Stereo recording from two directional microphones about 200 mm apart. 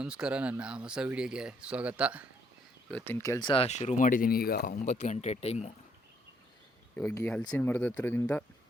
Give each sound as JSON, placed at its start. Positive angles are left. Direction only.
{"t": 0.0, "sound": "speech", "side_deg": -5}
{"t": 2.9, "sound": "speech", "side_deg": 10}
{"t": 6.9, "sound": "speech", "side_deg": 10}